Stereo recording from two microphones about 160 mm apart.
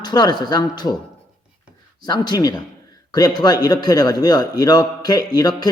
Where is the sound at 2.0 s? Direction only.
25° left (ahead or behind).